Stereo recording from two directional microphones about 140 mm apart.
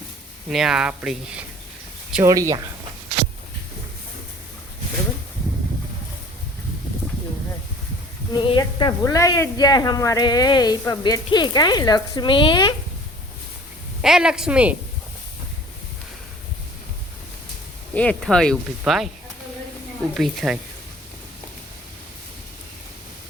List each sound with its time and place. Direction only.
0.4 s speech: 5° right (ahead or behind)
2.2 s speech: 20° right (ahead or behind)
8.4 s a woman's voice: 35° left (ahead or behind)
14.0 s speech: 5° right (ahead or behind)
17.9 s speech: 10° left (ahead or behind)
20.1 s speech: centre (ahead or behind)